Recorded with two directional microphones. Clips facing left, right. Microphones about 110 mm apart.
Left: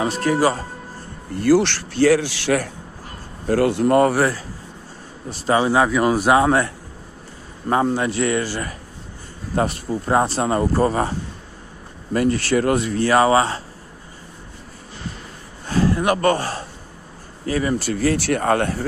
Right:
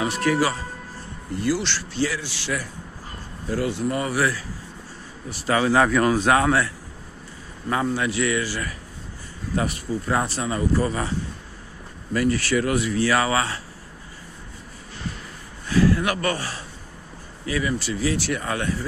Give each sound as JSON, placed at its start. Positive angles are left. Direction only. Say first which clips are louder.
{"t": 0.0, "sound": "a man's voice", "louder": "left 3 dB", "side_deg": 35}
{"t": 1.4, "sound": "speech", "louder": "left 9 dB", "side_deg": 55}
{"t": 4.1, "sound": "a man's voice", "louder": "left 4 dB", "side_deg": 35}
{"t": 5.8, "sound": "speech", "louder": "left 2 dB", "side_deg": 15}
{"t": 6.4, "sound": "a man's voice", "louder": "left 3 dB", "side_deg": 30}
{"t": 10.0, "sound": "a man's voice", "louder": "left 7 dB", "side_deg": 30}
{"t": 10.4, "sound": "a man's voice", "louder": "left 5 dB", "side_deg": 50}
{"t": 15.6, "sound": "speech", "louder": "left 1 dB", "side_deg": 35}